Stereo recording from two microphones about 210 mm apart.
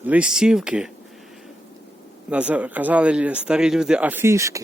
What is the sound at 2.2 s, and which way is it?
Speech, 5° right (ahead or behind).